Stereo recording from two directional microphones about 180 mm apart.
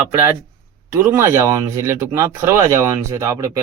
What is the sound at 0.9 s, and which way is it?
Speech, 10° right (ahead or behind).